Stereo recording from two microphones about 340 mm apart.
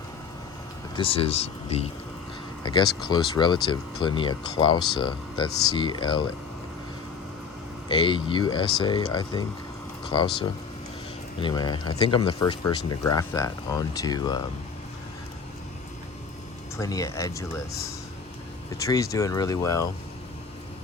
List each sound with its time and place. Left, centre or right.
0.9 s speech: centre
7.9 s speech: centre
16.7 s speech: centre
18.8 s speech: centre